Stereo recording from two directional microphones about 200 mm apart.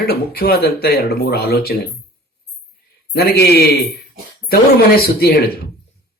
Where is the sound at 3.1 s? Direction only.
50° left (ahead or behind).